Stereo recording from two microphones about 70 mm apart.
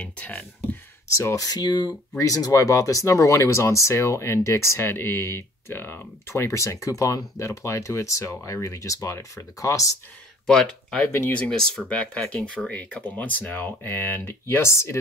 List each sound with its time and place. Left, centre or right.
0.0 s speech: left
1.1 s speech: left
2.1 s speech: left
10.4 s speech: centre
11.0 s speech: left
11.5 s speech: centre; by 15.0 s left